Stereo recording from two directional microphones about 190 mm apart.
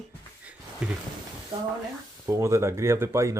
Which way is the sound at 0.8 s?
5° right (ahead or behind).